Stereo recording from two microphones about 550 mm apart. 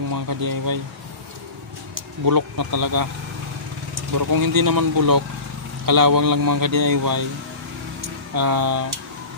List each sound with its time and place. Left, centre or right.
0.1 s speech: right
2.2 s speech: right
4.1 s speech: right
8.4 s speech: right